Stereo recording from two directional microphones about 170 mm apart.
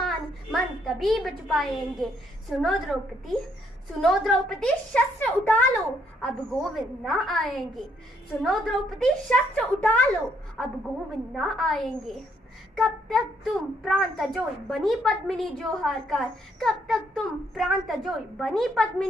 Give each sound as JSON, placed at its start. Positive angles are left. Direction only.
{"t": 0.0, "sound": "a child's voice", "side_deg": 0}